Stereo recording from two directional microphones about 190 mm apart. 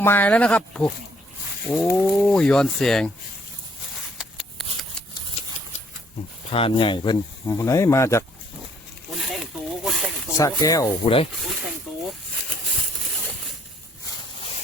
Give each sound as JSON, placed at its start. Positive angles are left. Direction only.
{"t": 0.0, "sound": "speech", "side_deg": 10}
{"t": 3.9, "sound": "a sound", "side_deg": 0}
{"t": 6.5, "sound": "speech", "side_deg": 30}
{"t": 9.1, "sound": "snake", "side_deg": 0}
{"t": 10.3, "sound": "speech", "side_deg": 15}
{"t": 11.0, "sound": "speech", "side_deg": 30}
{"t": 11.3, "sound": "speech", "side_deg": 0}
{"t": 13.1, "sound": "a sound", "side_deg": 0}